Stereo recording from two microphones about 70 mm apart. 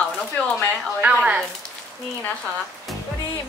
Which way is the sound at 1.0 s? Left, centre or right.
Centre.